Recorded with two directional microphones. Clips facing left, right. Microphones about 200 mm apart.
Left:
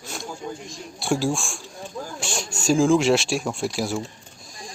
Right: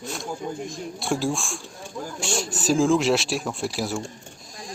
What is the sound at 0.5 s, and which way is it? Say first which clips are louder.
Speech: right 6 dB; 55° right (ahead or behind).